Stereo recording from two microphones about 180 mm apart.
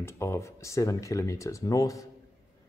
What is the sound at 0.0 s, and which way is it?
Speech, 15° left (ahead or behind).